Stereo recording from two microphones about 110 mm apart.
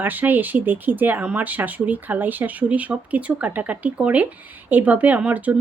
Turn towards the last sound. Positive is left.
turn(degrees=-15)  # may be behind; listen again after turning